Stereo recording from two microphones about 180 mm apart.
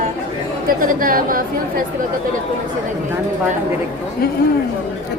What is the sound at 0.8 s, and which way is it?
Speech, 50° right (ahead or behind).